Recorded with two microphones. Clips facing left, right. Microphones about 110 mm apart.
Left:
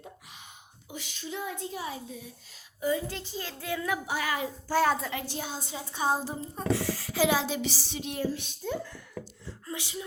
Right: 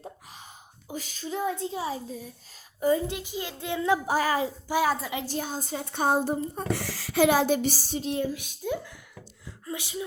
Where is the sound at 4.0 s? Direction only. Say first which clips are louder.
Right 6 dB; 40° right (ahead or behind).